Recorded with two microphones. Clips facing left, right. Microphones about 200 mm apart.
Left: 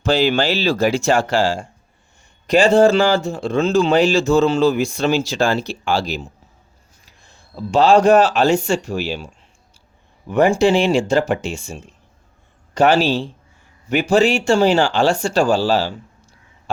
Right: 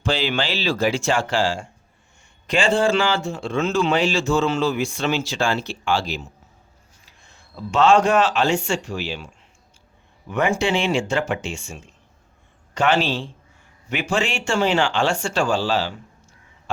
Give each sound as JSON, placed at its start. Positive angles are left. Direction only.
{"t": 0.0, "sound": "speech", "side_deg": 40}